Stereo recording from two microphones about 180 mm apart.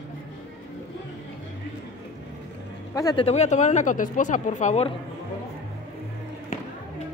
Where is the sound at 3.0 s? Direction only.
20° left (ahead or behind).